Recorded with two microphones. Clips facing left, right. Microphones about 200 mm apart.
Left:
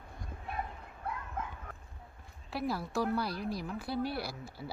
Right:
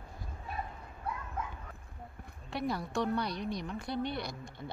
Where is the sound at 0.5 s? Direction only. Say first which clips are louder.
Left 1 dB; 60° left (ahead or behind).